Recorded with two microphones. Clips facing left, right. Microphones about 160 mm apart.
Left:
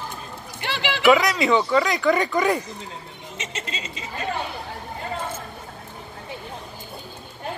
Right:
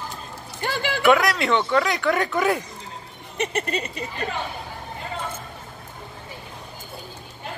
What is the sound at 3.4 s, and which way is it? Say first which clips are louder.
Speech: right 9 dB; 60° right (ahead or behind).